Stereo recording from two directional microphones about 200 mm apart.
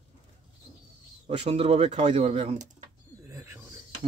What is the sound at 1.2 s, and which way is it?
Speech, 30° right (ahead or behind).